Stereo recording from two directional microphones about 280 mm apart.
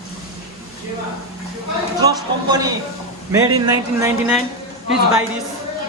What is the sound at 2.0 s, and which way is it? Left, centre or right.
Speech, centre.